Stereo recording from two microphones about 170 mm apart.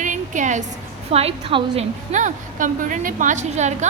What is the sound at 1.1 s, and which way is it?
Speech, 35° right (ahead or behind).